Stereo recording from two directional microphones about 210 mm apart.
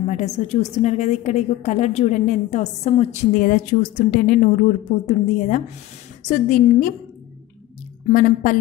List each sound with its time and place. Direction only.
0.1 s a woman's voice: 30° left (ahead or behind)
8.1 s a woman's voice: 40° left (ahead or behind)